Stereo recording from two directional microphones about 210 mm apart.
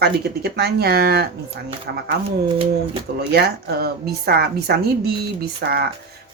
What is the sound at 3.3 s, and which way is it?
Speech, 50° right (ahead or behind).